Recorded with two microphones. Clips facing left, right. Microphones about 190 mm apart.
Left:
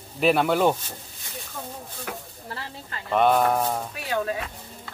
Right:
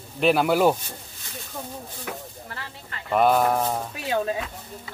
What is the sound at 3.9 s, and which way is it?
Speech, 25° right (ahead or behind).